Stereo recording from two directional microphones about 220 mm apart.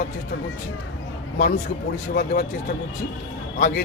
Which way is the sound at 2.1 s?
40° left (ahead or behind).